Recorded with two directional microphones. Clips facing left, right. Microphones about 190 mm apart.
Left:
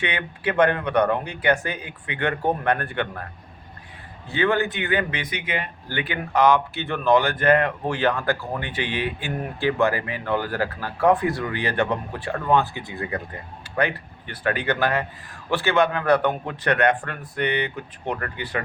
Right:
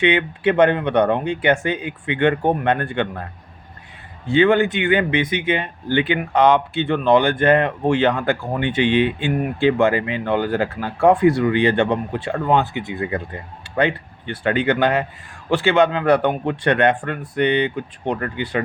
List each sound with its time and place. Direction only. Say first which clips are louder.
0.0 s speech: right 9 dB; 20° right (ahead or behind)
4.3 s speech: right 7 dB; 25° right (ahead or behind)